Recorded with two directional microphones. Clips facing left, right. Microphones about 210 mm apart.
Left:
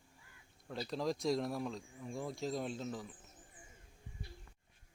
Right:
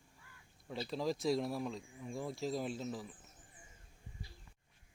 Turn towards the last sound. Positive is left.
turn(degrees=0)  # may be behind; listen again after turning